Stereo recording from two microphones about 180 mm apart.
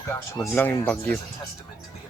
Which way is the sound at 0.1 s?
10° left (ahead or behind).